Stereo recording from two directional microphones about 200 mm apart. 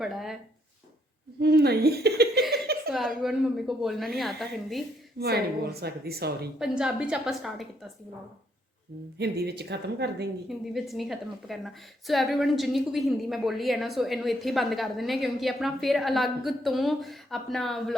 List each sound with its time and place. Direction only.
0.0 s a woman's voice: centre (ahead or behind)
1.4 s speech: 55° right (ahead or behind)
2.9 s a woman's voice: centre (ahead or behind)
5.2 s speech: 55° right (ahead or behind)
6.6 s a woman's voice: 5° right (ahead or behind)
9.1 s speech: 55° right (ahead or behind)
10.8 s a woman's voice: centre (ahead or behind)